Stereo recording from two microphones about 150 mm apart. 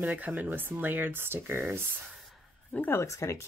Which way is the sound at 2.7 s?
15° left (ahead or behind).